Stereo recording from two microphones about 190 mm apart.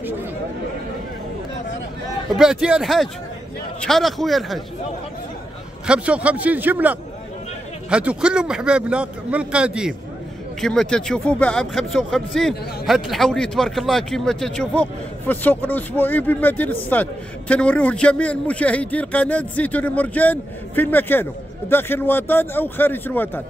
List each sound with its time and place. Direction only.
2.3 s a man's voice: 5° right (ahead or behind)
5.9 s a man's voice: 5° right (ahead or behind); by 23.4 s 10° left (ahead or behind)